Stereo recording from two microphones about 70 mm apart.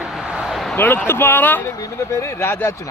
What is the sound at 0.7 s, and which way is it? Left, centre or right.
Speech, left.